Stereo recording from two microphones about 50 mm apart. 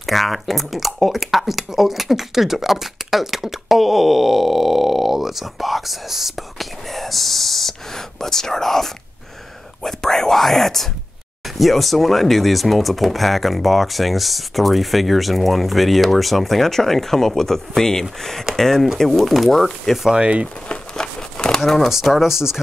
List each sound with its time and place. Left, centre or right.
0.0 s speech: centre
20.2 s speech: right
20.9 s crumpling: centre
22.0 s speech: centre